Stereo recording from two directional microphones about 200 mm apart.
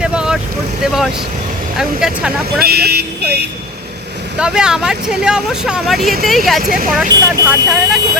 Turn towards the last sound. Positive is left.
turn(degrees=0)  # may be behind; listen again after turning